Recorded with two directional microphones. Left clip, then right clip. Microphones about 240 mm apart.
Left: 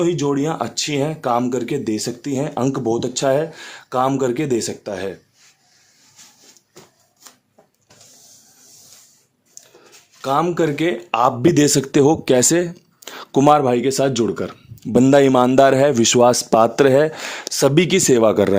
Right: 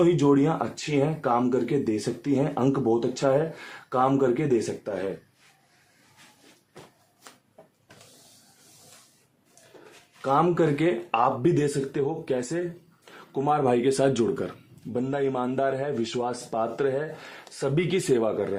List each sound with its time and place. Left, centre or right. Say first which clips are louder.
0.0 s speech: left 2 dB; centre; by 5.1 s left
10.2 s speech: left 4 dB; left
11.1 s speech: left 9 dB; left
14.9 s speech: left 15 dB; left